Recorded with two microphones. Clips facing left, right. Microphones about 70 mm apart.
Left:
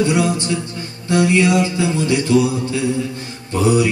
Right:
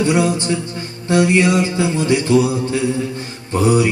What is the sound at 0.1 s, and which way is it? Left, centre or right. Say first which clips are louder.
Music: right 1 dB; right.